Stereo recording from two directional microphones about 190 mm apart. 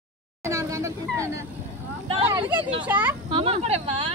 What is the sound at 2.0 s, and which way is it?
Speech, 30° right (ahead or behind).